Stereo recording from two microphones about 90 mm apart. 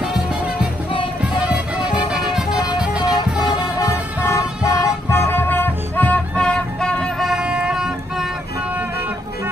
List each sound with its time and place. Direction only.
1.3 s music: 10° right (ahead or behind)
4.3 s vehicle: 40° left (ahead or behind)
5.1 s music: 25° left (ahead or behind); by 7.2 s 10° left (ahead or behind)
7.2 s music: 10° right (ahead or behind)